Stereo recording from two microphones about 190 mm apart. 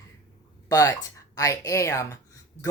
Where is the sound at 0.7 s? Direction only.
20° left (ahead or behind).